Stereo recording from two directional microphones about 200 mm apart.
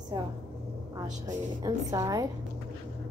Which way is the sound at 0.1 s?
25° right (ahead or behind).